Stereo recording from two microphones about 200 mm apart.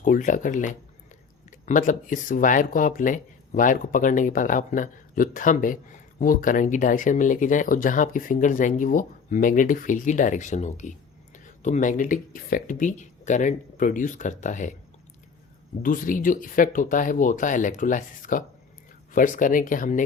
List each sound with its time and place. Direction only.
0.0 s speech: 40° left (ahead or behind)
15.8 s speech: 45° left (ahead or behind)